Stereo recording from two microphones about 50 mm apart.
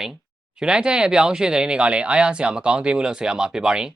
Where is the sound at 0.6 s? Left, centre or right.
Centre.